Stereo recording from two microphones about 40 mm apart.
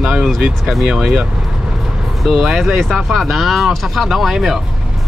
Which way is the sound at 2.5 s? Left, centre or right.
Centre.